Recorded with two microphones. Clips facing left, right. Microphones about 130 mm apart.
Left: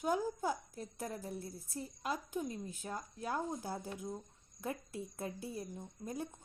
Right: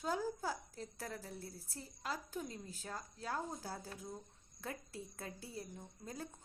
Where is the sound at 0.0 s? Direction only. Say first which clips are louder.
Left 4 dB; 20° left (ahead or behind).